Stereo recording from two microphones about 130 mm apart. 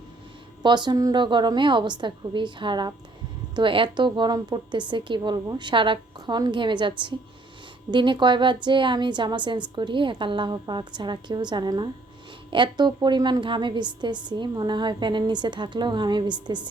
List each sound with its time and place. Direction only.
0.6 s a woman's voice: 35° right (ahead or behind)